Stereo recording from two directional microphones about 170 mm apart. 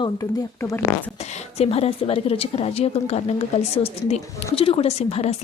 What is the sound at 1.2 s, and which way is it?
A woman's voice, 40° left (ahead or behind).